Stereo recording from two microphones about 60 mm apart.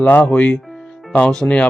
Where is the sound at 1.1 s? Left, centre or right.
Centre.